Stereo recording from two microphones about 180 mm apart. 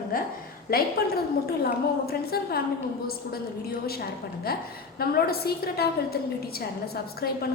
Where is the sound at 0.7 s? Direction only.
55° left (ahead or behind).